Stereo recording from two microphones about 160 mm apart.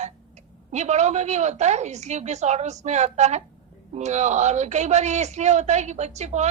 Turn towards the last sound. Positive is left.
turn(degrees=-45)  # may be behind; listen again after turning